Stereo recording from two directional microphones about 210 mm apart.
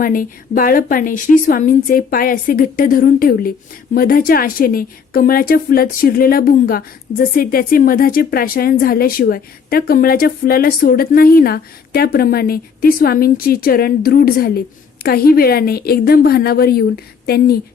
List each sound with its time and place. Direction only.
0.0 s a woman's voice: 40° left (ahead or behind)